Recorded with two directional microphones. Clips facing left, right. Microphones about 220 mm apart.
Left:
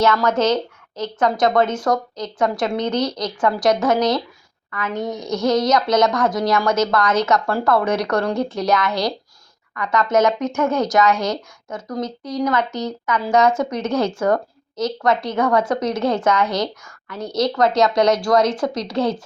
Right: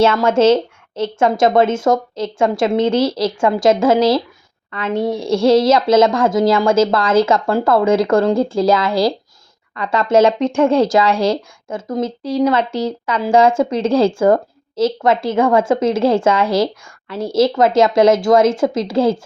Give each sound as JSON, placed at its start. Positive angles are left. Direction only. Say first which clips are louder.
{"t": 0.0, "sound": "speech", "louder": "right 5 dB", "side_deg": -25}